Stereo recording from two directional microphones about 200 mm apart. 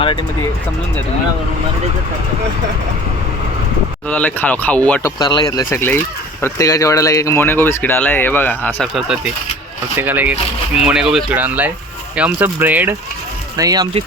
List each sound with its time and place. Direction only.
4.1 s speech: 10° left (ahead or behind)
5.2 s speech: 20° left (ahead or behind); by 13.0 s 10° right (ahead or behind)
13.6 s speech: 20° right (ahead or behind)